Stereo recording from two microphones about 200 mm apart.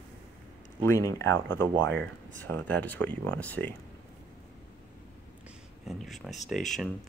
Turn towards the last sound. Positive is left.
turn(degrees=0)  # may be behind; listen again after turning